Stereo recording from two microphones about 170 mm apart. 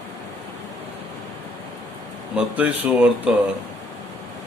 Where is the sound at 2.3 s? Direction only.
5° right (ahead or behind).